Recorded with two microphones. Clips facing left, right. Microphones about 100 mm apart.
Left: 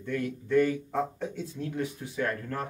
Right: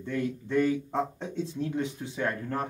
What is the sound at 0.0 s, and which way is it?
Speech, 20° right (ahead or behind).